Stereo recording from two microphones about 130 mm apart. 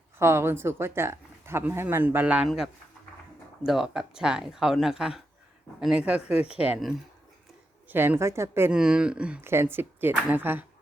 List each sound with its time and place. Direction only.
0.2 s speech: 20° right (ahead or behind)
3.7 s speech: 5° right (ahead or behind); by 8.7 s 20° right (ahead or behind)
8.7 s speech: 5° right (ahead or behind)